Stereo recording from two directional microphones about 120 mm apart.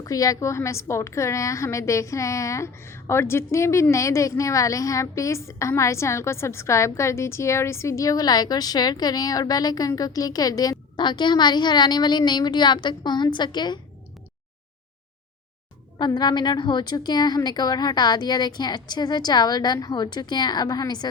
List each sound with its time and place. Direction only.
0.0 s a woman's voice: 30° left (ahead or behind)
16.0 s a woman's voice: 35° left (ahead or behind)